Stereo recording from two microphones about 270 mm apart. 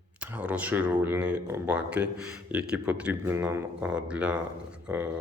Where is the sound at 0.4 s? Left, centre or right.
Centre.